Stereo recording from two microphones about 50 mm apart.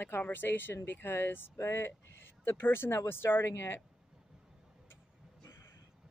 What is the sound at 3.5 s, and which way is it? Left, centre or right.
Speech, left.